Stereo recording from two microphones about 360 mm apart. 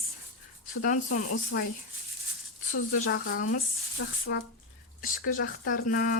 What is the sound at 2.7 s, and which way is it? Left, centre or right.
Speech, left.